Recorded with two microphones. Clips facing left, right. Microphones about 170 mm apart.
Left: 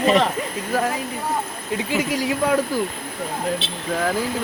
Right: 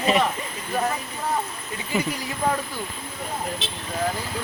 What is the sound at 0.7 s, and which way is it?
Speech, 90° left.